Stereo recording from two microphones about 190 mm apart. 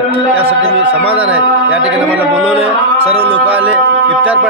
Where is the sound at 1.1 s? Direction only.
5° right (ahead or behind).